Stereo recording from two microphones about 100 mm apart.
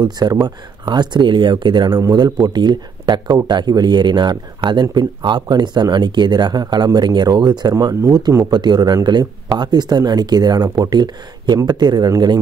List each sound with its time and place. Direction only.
0.0 s speech: 40° right (ahead or behind)
2.0 s speech: 40° right (ahead or behind)
8.5 s speech: 45° right (ahead or behind)